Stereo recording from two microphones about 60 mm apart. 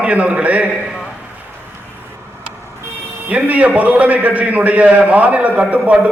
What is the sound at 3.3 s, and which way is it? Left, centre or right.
A man's voice, right.